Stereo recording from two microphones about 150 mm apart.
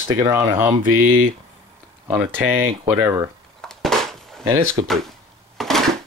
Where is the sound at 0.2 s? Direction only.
20° right (ahead or behind).